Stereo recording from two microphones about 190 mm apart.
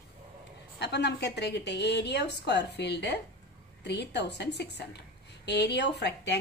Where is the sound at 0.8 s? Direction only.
65° left (ahead or behind).